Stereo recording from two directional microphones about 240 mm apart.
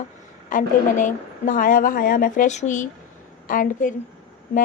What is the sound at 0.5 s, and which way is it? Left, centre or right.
Speech, left.